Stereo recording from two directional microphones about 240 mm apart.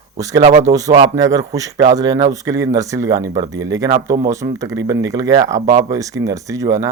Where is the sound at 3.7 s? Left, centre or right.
Centre.